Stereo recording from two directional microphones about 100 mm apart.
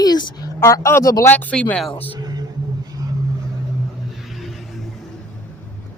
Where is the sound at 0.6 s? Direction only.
30° left (ahead or behind).